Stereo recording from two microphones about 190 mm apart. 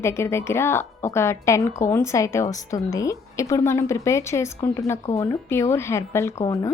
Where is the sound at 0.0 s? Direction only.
15° left (ahead or behind).